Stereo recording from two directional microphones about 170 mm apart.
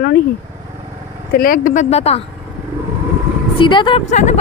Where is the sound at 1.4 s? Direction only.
55° left (ahead or behind); by 2.2 s 35° left (ahead or behind).